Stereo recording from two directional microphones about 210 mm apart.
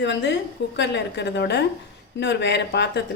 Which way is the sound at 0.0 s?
55° left (ahead or behind).